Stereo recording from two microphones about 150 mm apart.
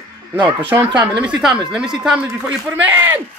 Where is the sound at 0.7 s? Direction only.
15° right (ahead or behind).